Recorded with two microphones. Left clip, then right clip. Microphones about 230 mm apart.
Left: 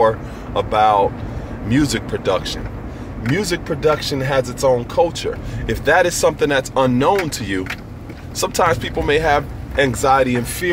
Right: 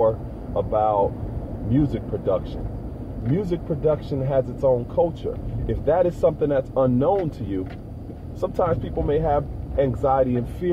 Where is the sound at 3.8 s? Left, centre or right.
Left.